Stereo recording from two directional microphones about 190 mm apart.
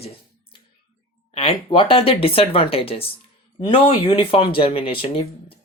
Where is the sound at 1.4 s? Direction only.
25° left (ahead or behind).